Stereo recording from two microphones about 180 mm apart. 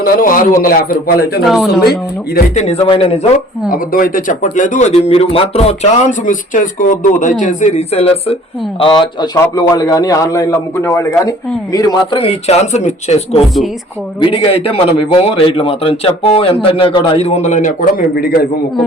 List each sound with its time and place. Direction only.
0.0 s a man's voice: 50° left (ahead or behind)
2.6 s a man's voice: 35° left (ahead or behind)
3.7 s a man's voice: 50° left (ahead or behind)